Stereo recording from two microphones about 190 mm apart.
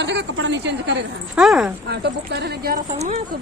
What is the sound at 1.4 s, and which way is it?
Speech, 5° right (ahead or behind).